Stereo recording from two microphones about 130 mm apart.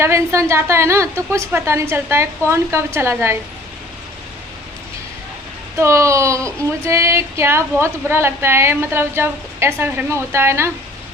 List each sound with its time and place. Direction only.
0.0 s speech: 20° right (ahead or behind)
5.7 s speech: 20° right (ahead or behind)